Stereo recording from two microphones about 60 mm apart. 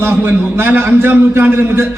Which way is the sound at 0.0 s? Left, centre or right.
Right.